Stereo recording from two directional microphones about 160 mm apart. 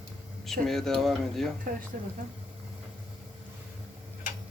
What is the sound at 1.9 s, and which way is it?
Speech, 65° right (ahead or behind).